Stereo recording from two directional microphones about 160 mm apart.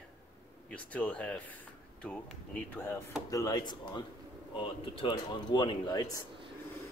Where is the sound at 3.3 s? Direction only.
20° left (ahead or behind).